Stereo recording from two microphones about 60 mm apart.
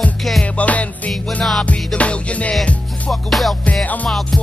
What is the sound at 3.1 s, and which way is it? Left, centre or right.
Music, centre.